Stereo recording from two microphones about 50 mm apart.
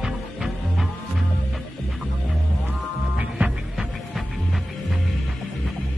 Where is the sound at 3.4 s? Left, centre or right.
Right.